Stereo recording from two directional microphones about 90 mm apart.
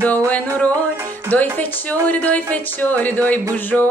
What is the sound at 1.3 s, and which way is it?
Speech, 20° left (ahead or behind).